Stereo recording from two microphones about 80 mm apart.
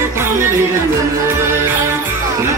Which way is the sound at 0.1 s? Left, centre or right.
Right.